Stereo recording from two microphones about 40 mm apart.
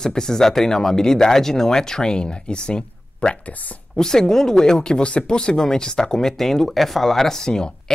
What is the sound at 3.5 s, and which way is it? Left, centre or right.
Speech, left.